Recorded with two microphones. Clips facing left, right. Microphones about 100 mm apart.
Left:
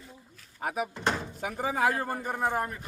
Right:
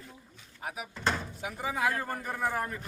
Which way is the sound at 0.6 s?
55° left (ahead or behind).